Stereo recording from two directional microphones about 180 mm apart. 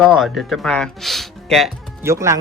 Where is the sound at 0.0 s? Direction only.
Centre (ahead or behind).